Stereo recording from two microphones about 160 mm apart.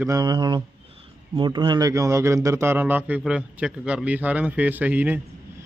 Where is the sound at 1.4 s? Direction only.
30° right (ahead or behind); by 5.2 s 10° right (ahead or behind).